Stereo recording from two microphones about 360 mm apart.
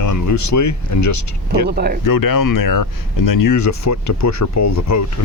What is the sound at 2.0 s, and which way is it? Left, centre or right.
Speech, left.